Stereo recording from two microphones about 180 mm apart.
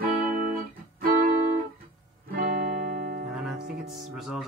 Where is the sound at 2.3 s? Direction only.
55° right (ahead or behind).